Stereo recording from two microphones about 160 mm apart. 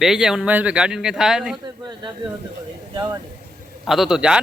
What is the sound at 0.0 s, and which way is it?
Speech, 5° right (ahead or behind).